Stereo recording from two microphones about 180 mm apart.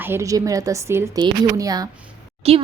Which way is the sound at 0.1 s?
15° right (ahead or behind).